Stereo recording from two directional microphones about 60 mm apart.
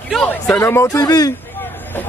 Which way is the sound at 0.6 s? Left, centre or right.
Left.